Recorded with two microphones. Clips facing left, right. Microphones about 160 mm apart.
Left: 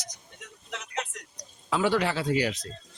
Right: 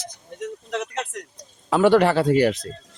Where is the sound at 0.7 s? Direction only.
60° right (ahead or behind).